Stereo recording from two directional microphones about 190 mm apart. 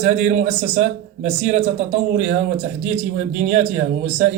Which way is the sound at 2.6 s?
35° right (ahead or behind).